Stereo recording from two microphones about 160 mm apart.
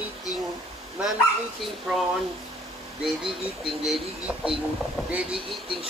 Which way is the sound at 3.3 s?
Centre (ahead or behind).